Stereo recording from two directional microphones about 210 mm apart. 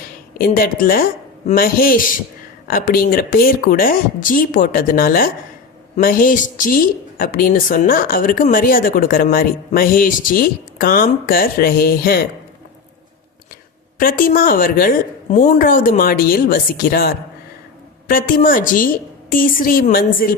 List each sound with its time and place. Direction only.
0.3 s a woman's voice: 45° left (ahead or behind)
14.0 s a woman's voice: 40° left (ahead or behind)
18.3 s a woman's voice: 40° left (ahead or behind)